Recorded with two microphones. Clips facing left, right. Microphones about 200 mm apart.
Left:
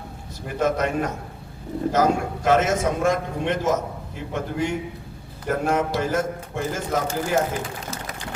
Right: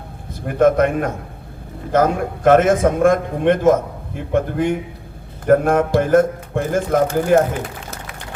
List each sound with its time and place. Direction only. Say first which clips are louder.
0.4 s a man's voice: right 8 dB; 55° right (ahead or behind)